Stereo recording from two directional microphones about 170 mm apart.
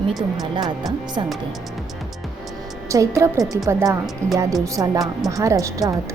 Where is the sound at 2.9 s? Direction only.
15° right (ahead or behind).